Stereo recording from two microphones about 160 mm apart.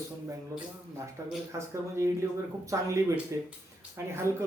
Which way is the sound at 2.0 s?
20° right (ahead or behind).